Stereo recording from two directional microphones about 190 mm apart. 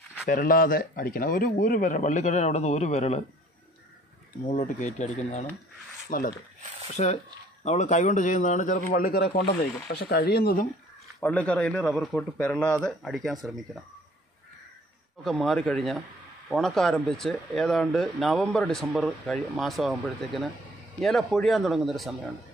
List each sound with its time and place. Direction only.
0.3 s a man's voice: 50° left (ahead or behind)
4.5 s speech: 40° left (ahead or behind)
6.0 s speech: 50° left (ahead or behind)
7.0 s a man's voice: 35° left (ahead or behind); by 10.7 s 55° left (ahead or behind)
11.1 s speech: 5° left (ahead or behind)
15.2 s speech: 5° left (ahead or behind)